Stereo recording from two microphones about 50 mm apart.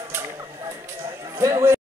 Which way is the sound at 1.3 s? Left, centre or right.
Right.